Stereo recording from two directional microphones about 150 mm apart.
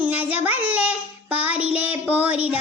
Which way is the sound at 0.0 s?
10° right (ahead or behind).